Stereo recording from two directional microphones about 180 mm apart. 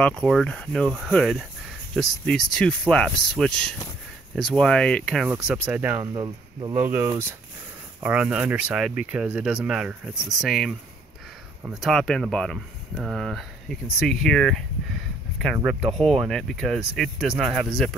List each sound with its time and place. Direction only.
0.0 s speech: 5° left (ahead or behind)
6.1 s speech: 25° right (ahead or behind); by 17.9 s centre (ahead or behind)